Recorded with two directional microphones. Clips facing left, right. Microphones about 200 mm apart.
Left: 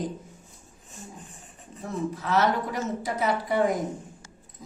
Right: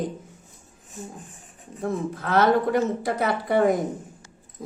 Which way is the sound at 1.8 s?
55° right (ahead or behind).